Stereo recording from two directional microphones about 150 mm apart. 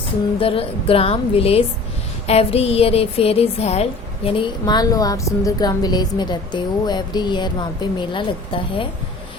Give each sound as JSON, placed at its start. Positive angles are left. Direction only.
{"t": 0.3, "sound": "a woman's voice", "side_deg": 40}